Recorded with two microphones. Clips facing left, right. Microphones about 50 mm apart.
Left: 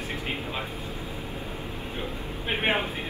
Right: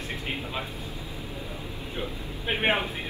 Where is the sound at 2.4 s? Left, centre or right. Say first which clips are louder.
Right 1 dB; centre.